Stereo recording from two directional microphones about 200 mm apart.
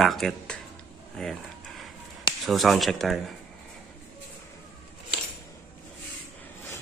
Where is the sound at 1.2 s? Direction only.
5° left (ahead or behind).